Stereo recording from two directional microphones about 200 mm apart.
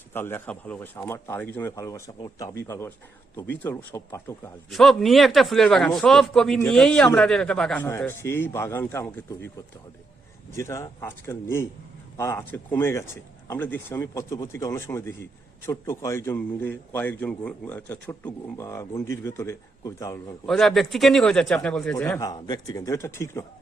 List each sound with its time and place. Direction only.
0.1 s a man's voice: 10° left (ahead or behind)
4.7 s a man's voice: centre (ahead or behind)
10.5 s a man's voice: 15° left (ahead or behind)
20.5 s a man's voice: centre (ahead or behind)
22.3 s a man's voice: 20° left (ahead or behind)